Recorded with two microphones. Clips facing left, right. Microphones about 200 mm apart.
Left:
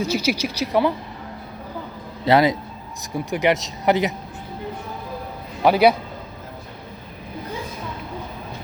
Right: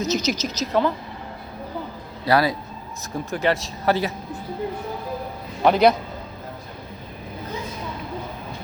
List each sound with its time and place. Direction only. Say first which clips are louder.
0.0 s speech: left 1 dB; 10° left (ahead or behind)
2.2 s speech: left 3 dB; 20° left (ahead or behind)
5.6 s speech: left 1 dB; 5° left (ahead or behind)